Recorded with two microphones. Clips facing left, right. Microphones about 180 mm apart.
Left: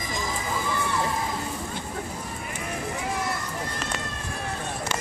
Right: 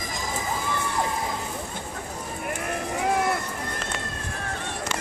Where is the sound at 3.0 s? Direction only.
60° right (ahead or behind).